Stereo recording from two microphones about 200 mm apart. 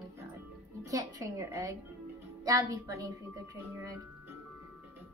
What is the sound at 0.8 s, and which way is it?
A child's voice, 15° right (ahead or behind).